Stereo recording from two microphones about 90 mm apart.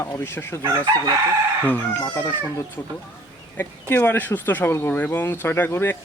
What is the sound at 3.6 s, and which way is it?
Speech, 20° left (ahead or behind).